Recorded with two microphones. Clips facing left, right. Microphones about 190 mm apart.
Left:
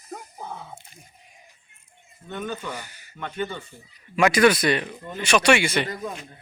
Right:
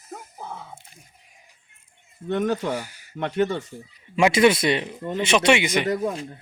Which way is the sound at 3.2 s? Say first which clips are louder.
Right 7 dB; 85° right.